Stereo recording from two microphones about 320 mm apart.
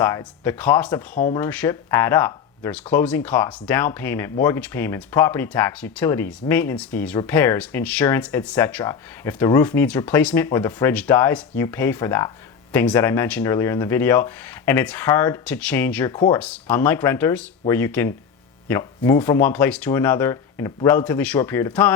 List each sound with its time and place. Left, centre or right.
0.0 s speech: centre
1.1 s speech: left
1.4 s speech: centre